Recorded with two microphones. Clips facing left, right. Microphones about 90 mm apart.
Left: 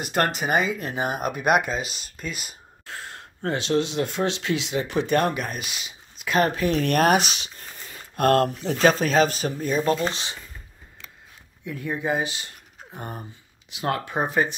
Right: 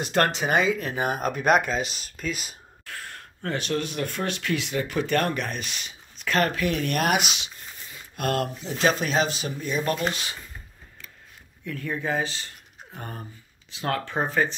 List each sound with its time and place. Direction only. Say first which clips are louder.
0.0 s speech: right 1 dB; 5° left (ahead or behind)
2.8 s speech: left 2 dB; 25° left (ahead or behind)
5.4 s speech: even; 5° left (ahead or behind)
6.5 s speech: left 4 dB; 30° left (ahead or behind)
9.8 s speech: left 3 dB; 25° left (ahead or behind)
11.6 s speech: left 2 dB; 15° left (ahead or behind)